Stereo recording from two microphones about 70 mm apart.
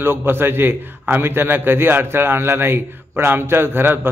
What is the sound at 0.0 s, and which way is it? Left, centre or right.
A man's voice, right.